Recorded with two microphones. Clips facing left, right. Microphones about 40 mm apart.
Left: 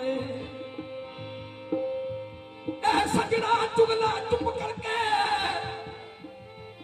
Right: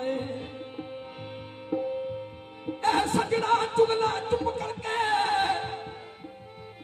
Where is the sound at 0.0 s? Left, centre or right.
Left.